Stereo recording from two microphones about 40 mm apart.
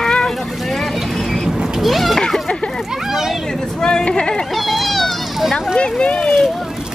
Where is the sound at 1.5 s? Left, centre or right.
Centre.